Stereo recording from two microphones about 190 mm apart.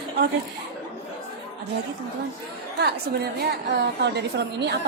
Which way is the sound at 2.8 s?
60° right (ahead or behind).